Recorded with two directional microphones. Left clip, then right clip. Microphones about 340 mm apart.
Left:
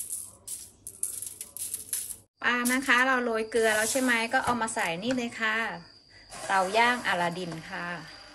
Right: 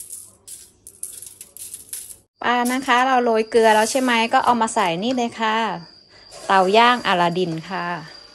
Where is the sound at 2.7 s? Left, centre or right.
Centre.